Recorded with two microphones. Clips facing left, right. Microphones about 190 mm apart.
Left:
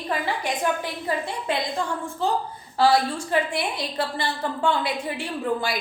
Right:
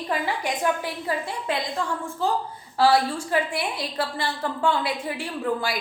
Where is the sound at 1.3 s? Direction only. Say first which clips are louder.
Left 1 dB; centre (ahead or behind).